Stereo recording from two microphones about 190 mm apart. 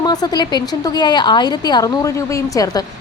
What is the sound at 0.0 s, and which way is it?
A woman's voice, 20° left (ahead or behind).